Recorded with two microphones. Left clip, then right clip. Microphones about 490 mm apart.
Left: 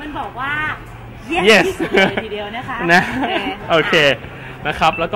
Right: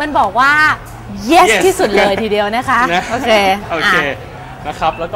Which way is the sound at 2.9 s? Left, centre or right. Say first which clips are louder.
Left 2 dB; left.